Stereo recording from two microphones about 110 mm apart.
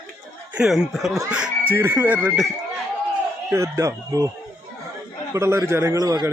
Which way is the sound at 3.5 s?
25° right (ahead or behind).